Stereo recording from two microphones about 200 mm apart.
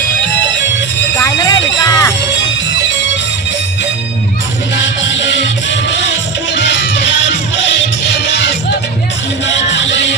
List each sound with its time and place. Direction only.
1.1 s music: 15° left (ahead or behind)
4.7 s music: 65° left (ahead or behind)